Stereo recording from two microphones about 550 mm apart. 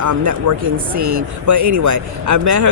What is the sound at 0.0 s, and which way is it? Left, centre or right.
Speech, right.